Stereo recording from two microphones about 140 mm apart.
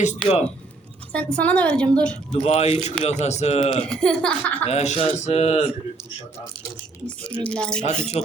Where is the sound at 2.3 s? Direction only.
50° left (ahead or behind).